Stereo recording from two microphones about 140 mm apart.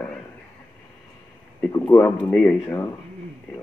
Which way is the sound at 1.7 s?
20° left (ahead or behind).